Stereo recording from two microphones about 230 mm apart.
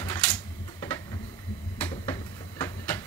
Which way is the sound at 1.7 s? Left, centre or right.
Centre.